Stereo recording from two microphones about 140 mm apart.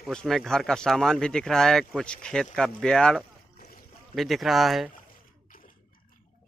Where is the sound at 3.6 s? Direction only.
90° left.